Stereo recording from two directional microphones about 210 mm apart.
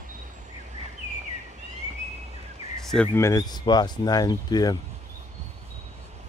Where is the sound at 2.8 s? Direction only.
5° left (ahead or behind).